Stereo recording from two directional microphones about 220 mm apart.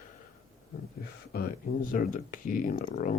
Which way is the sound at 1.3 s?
45° left (ahead or behind).